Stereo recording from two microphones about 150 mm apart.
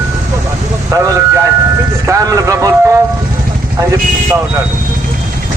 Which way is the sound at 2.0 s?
20° right (ahead or behind).